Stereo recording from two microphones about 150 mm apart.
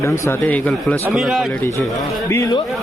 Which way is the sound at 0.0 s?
10° left (ahead or behind).